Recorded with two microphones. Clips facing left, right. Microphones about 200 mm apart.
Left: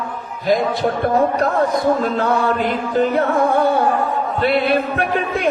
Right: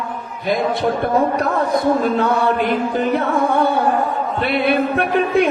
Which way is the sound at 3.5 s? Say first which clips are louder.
Left 1 dB; 60° right (ahead or behind).